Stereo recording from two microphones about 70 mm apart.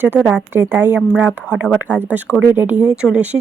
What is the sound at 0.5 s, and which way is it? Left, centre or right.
Speech, right.